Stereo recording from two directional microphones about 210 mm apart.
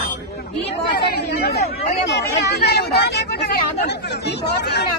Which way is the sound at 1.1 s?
50° left (ahead or behind).